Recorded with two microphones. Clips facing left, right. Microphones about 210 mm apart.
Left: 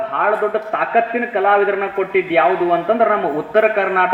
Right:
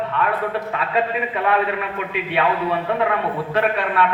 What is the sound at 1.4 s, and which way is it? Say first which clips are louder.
A man's voice: left 7 dB; 55° left (ahead or behind).